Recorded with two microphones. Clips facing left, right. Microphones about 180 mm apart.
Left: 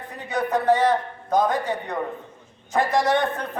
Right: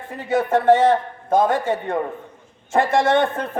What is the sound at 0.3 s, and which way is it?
A man's voice, 25° right (ahead or behind).